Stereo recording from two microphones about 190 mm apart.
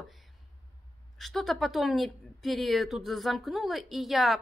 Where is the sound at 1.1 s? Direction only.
Centre (ahead or behind).